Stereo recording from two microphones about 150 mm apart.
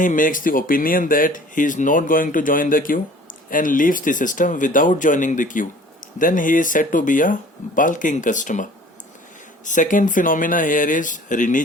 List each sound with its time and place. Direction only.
0.0 s speech: 60° left (ahead or behind)